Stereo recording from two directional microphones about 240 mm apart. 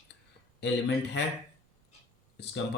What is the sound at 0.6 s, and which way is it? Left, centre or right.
Speech, left.